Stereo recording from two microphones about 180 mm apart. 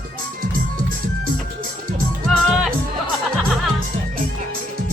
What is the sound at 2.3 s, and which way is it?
Music, centre (ahead or behind).